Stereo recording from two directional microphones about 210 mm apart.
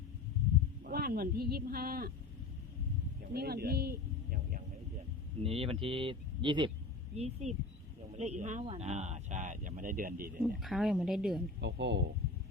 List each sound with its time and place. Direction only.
0.9 s speech: 45° right (ahead or behind)
3.3 s speech: 50° right (ahead or behind)
5.4 s speech: 25° right (ahead or behind); by 10.4 s 45° right (ahead or behind)
10.6 s a woman's voice: centre (ahead or behind)
11.6 s a man's voice: 55° right (ahead or behind)